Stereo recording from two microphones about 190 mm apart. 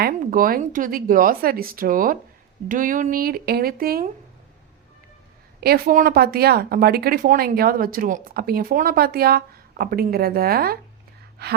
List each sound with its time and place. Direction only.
0.0 s speech: 45° right (ahead or behind)
5.5 s speech: 55° right (ahead or behind)
11.4 s gasp: 60° right (ahead or behind)